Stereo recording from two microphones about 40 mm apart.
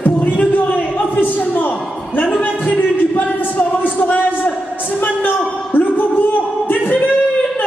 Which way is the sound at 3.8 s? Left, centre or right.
Left.